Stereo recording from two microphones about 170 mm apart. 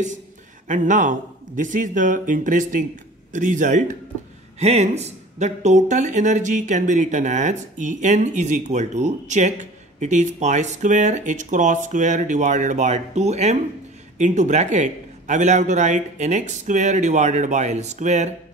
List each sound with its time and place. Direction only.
0.7 s speech: 50° right (ahead or behind)